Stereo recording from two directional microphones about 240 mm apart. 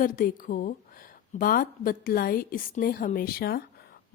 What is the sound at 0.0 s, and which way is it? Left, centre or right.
A woman's voice, left.